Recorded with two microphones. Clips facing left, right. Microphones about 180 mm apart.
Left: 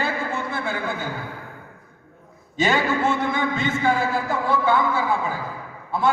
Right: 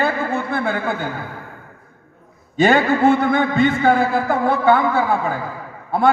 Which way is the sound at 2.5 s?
55° right (ahead or behind).